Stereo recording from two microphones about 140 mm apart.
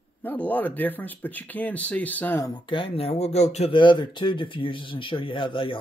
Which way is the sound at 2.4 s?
35° left (ahead or behind).